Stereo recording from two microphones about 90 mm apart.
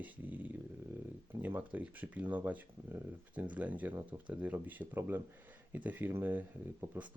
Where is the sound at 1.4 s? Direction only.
20° right (ahead or behind).